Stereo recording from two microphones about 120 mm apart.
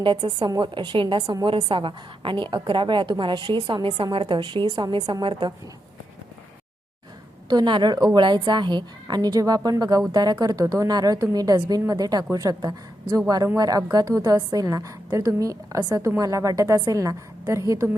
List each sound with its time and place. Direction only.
0.0 s a woman's voice: 40° right (ahead or behind)
7.5 s a woman's voice: 40° right (ahead or behind)